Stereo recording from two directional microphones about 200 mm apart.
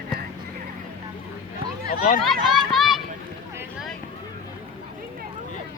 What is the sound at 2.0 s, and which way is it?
Speech, 45° left (ahead or behind).